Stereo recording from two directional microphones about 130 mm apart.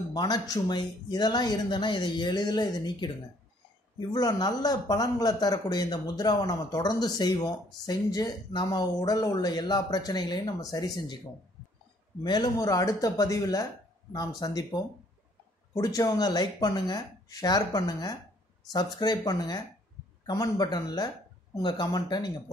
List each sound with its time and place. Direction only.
0.1 s speech: 30° left (ahead or behind)
4.1 s speech: 30° left (ahead or behind)
12.2 s speech: 30° left (ahead or behind)